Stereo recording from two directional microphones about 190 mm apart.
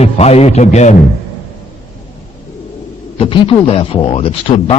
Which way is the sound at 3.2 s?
30° left (ahead or behind).